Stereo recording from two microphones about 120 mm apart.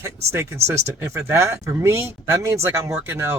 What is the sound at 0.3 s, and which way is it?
Speech, 20° right (ahead or behind).